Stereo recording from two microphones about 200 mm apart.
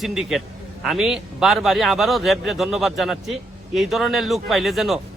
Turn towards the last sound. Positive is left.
turn(degrees=0)  # may be behind; listen again after turning